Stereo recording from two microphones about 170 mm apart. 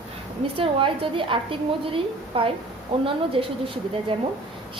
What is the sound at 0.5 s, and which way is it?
A woman's voice, 30° right (ahead or behind).